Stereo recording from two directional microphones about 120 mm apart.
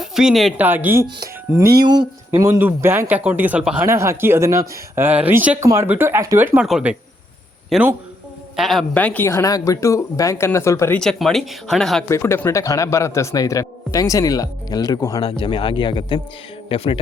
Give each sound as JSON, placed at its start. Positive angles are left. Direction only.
{"t": 0.0, "sound": "a woman's voice", "side_deg": -5}
{"t": 0.5, "sound": "a woman's voice", "side_deg": -15}
{"t": 1.2, "sound": "music", "side_deg": -30}
{"t": 2.3, "sound": "a woman's voice", "side_deg": -20}
{"t": 3.8, "sound": "speech", "side_deg": -25}
{"t": 5.5, "sound": "speech", "side_deg": -25}
{"t": 6.7, "sound": "speech", "side_deg": -5}
{"t": 8.9, "sound": "a man's voice", "side_deg": 10}
{"t": 10.9, "sound": "speech", "side_deg": 5}
{"t": 12.0, "sound": "a man's voice", "side_deg": 20}
{"t": 15.2, "sound": "speech", "side_deg": 50}